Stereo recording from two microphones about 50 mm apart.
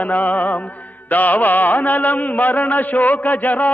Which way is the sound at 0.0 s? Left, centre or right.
Left.